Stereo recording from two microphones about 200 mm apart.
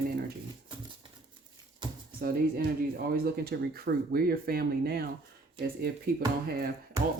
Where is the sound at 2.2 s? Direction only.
50° right (ahead or behind).